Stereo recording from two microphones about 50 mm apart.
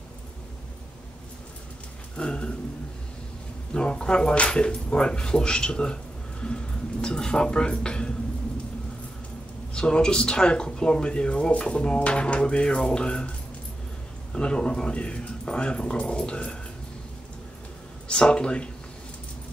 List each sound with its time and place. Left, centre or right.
2.1 s speech: centre
3.7 s speech: centre
9.8 s speech: centre
14.3 s speech: centre
18.0 s speech: centre